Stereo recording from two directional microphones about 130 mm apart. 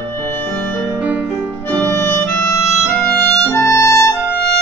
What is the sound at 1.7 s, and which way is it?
Music, 10° left (ahead or behind).